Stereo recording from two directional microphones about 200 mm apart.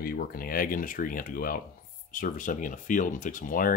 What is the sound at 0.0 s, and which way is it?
Speech, 50° left (ahead or behind).